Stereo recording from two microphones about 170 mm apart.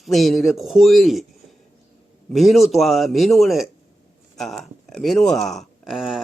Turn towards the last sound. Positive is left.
turn(degrees=0)  # may be behind; listen again after turning